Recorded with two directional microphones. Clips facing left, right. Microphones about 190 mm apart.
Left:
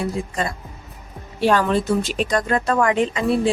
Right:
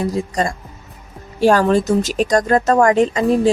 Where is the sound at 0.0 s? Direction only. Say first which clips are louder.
Right 5 dB; 40° right (ahead or behind).